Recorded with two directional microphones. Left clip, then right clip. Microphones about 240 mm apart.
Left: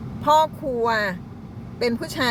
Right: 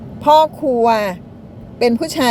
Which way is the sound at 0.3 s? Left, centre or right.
Right.